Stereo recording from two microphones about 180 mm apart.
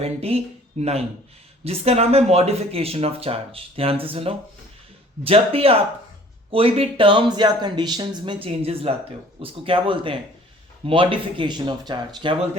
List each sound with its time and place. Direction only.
0.0 s speech: 35° right (ahead or behind)